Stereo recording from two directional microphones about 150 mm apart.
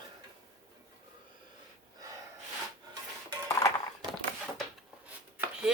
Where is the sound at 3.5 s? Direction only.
20° left (ahead or behind).